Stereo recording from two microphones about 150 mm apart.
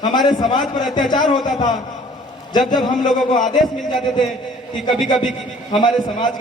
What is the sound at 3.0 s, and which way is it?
Speech, 55° left (ahead or behind).